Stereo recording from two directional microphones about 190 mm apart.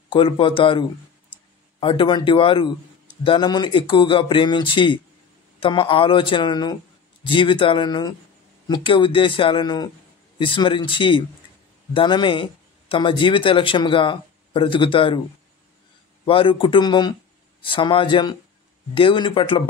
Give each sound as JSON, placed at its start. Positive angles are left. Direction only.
{"t": 0.1, "sound": "speech", "side_deg": 25}
{"t": 16.3, "sound": "speech", "side_deg": 30}